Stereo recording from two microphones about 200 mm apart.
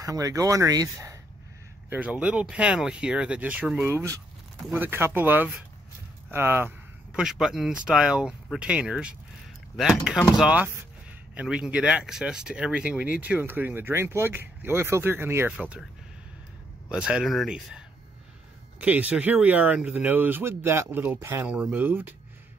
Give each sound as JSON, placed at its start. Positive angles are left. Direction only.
{"t": 0.0, "sound": "speech", "side_deg": -15}
{"t": 16.9, "sound": "speech", "side_deg": -5}